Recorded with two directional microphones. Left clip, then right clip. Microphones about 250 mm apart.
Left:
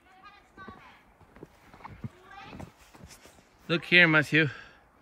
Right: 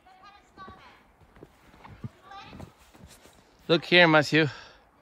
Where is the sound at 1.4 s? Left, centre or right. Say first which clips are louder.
Left 3 dB; centre.